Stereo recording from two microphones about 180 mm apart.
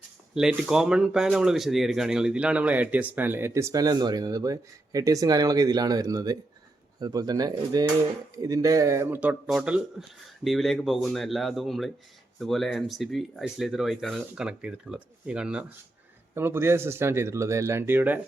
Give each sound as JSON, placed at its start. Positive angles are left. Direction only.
{"t": 0.3, "sound": "speech", "side_deg": -5}